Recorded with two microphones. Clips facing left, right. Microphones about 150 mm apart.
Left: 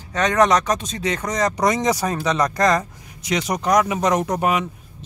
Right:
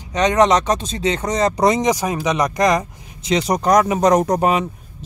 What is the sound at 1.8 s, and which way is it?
Speech, 15° right (ahead or behind).